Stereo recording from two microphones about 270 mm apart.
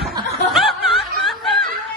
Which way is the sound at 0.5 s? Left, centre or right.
Centre.